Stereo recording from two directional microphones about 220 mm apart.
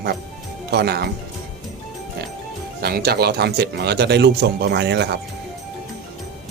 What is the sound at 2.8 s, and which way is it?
Speech, 45° right (ahead or behind).